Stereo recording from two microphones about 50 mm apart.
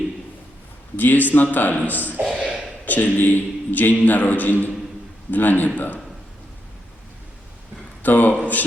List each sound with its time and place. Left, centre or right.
0.9 s a man's voice: left
2.3 s a sound: centre
2.8 s a man's voice: left
8.0 s a man's voice: left